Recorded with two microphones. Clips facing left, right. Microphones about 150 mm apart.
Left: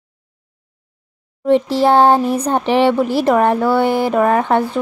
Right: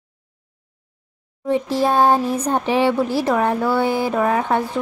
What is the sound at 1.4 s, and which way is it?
Speech, 75° left (ahead or behind).